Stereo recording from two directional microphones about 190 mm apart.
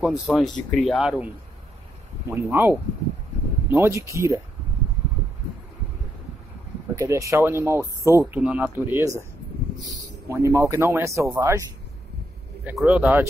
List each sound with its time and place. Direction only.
0.0 s speech: 5° right (ahead or behind)
3.7 s speech: 15° right (ahead or behind)
7.0 s speech: 15° right (ahead or behind)
12.6 s speech: 5° right (ahead or behind)